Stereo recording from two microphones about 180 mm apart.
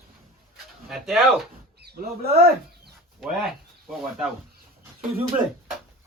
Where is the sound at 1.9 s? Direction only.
60° right (ahead or behind).